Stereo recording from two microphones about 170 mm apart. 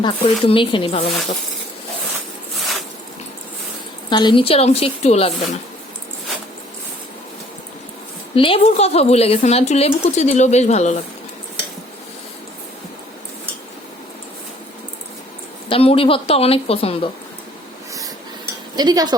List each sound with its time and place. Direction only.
0.0 s speech: 30° left (ahead or behind)
4.1 s speech: 25° left (ahead or behind)
8.4 s speech: 35° left (ahead or behind)
15.7 s speech: 35° left (ahead or behind)
18.8 s speech: 25° right (ahead or behind)